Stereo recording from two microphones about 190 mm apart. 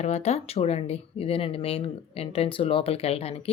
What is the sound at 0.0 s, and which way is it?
A woman's voice, 35° left (ahead or behind).